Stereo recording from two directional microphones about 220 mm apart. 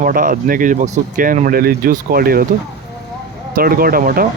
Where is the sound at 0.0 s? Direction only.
40° right (ahead or behind).